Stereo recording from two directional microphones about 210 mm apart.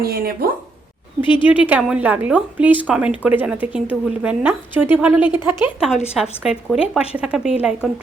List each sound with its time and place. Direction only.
0.0 s speech: 45° right (ahead or behind)
1.2 s speech: 25° left (ahead or behind)
1.5 s a woman's voice: 5° right (ahead or behind)